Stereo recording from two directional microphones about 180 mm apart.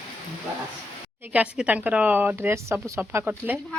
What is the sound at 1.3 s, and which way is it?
Speech, 10° right (ahead or behind).